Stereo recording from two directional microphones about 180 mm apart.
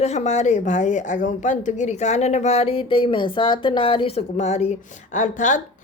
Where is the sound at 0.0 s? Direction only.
40° left (ahead or behind).